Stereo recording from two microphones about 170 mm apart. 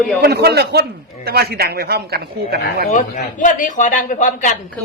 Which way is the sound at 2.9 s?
50° left (ahead or behind).